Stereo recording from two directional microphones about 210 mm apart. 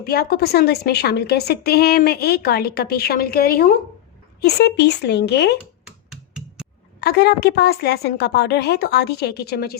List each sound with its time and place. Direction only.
0.0 s a woman's voice: 45° left (ahead or behind)
6.1 s finger snapping: centre (ahead or behind)
7.0 s a woman's voice: 50° left (ahead or behind)